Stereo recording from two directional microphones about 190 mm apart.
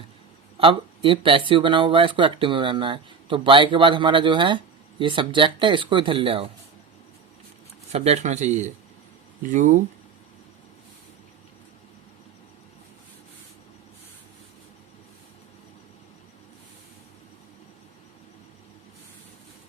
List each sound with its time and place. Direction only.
0.5 s speech: 25° right (ahead or behind)
7.9 s speech: 35° right (ahead or behind)